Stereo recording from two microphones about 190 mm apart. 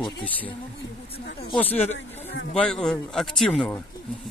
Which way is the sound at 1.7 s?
35° left (ahead or behind).